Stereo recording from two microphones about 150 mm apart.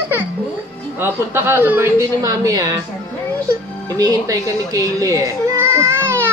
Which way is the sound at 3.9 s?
25° right (ahead or behind).